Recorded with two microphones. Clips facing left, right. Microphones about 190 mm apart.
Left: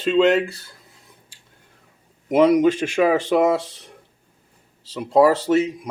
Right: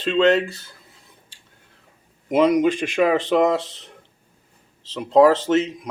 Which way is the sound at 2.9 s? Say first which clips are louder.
Left 1 dB; 10° left (ahead or behind).